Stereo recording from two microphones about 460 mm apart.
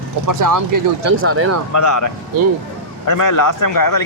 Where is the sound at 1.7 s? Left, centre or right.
Left.